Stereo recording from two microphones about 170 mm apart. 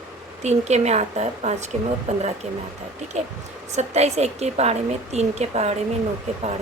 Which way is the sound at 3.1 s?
40° right (ahead or behind).